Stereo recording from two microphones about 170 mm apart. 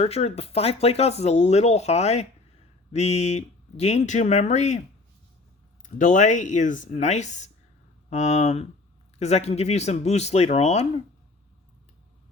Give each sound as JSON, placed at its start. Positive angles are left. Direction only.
{"t": 0.0, "sound": "speech", "side_deg": 35}
{"t": 5.8, "sound": "speech", "side_deg": 50}